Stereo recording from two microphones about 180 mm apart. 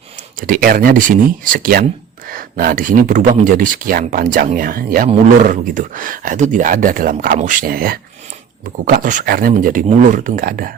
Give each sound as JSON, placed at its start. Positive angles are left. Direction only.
{"t": 0.4, "sound": "speech", "side_deg": -50}